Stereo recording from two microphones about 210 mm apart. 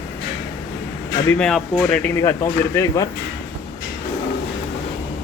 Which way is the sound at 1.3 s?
5° left (ahead or behind).